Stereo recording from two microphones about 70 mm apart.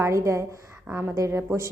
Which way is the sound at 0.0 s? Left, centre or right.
Right.